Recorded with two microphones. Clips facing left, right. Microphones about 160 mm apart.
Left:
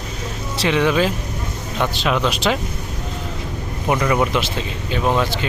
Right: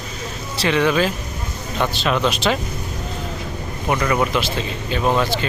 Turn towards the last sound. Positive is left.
turn(degrees=0)  # may be behind; listen again after turning